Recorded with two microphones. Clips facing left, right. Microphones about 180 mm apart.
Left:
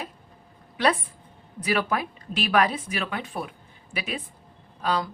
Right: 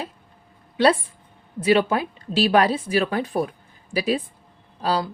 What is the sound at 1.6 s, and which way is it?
A woman's voice, 25° right (ahead or behind).